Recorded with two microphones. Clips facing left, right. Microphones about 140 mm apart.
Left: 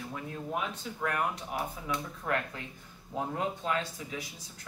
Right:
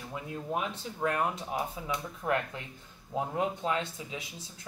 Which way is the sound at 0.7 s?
25° right (ahead or behind).